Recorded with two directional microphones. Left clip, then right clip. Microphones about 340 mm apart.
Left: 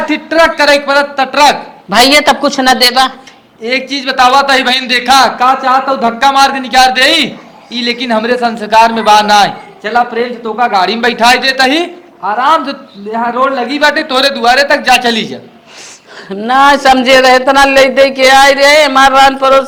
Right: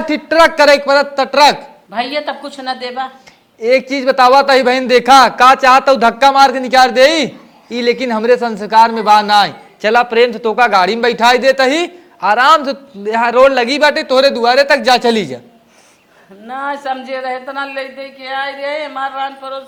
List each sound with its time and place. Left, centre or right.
0.1 s a man's voice: right
1.9 s a man's voice: left
3.6 s a man's voice: right
9.8 s a man's voice: right
12.2 s a man's voice: right
13.7 s a man's voice: right
16.5 s a man's voice: left